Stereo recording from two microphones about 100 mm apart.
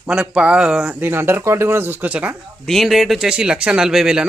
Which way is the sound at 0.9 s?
20° right (ahead or behind).